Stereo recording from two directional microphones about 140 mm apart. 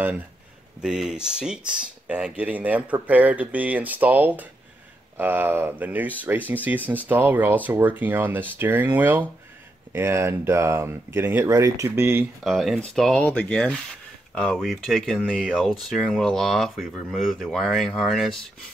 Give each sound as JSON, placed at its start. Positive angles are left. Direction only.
{"t": 0.7, "sound": "speech", "side_deg": -5}
{"t": 12.4, "sound": "speech", "side_deg": 0}